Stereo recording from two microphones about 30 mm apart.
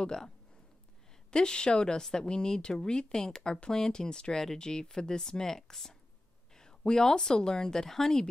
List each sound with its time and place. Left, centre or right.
0.0 s speech: centre
1.3 s speech: left